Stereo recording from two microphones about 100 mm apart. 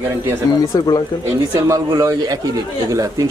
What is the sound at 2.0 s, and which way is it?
Speech, 35° right (ahead or behind).